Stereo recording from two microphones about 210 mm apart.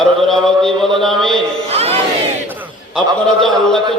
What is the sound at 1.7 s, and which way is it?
Battle cry, 30° right (ahead or behind).